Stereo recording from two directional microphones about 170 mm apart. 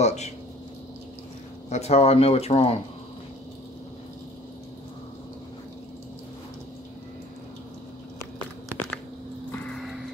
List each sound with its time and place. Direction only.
0.0 s speech: 40° left (ahead or behind)
1.7 s speech: 40° left (ahead or behind)